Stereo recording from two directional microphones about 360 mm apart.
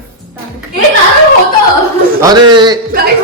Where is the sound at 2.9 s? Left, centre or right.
Right.